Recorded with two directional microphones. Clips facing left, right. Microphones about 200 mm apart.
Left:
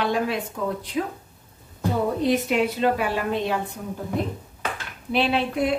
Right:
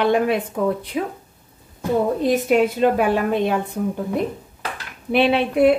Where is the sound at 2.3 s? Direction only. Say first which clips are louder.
Right 6 dB; 50° right (ahead or behind).